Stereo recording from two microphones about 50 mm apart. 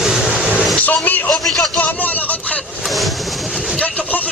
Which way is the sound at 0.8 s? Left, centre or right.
Left.